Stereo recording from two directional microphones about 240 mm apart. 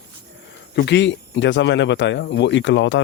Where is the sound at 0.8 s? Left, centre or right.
Left.